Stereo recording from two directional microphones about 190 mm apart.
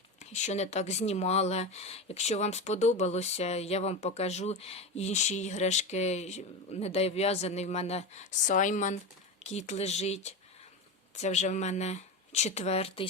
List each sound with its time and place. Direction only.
0.2 s speech: 35° left (ahead or behind)